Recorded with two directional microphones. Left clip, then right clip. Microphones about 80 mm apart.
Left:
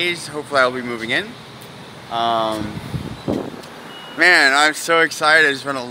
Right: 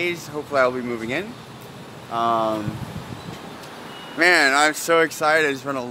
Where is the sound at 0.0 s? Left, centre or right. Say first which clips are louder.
Left 4 dB; right.